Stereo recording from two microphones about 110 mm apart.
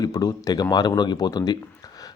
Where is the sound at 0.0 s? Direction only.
35° left (ahead or behind).